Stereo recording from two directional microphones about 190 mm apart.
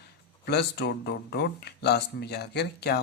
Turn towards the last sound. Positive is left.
turn(degrees=60)  # may be behind; listen again after turning